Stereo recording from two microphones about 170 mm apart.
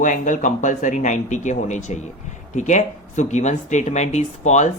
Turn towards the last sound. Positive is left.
turn(degrees=40)  # may be behind; listen again after turning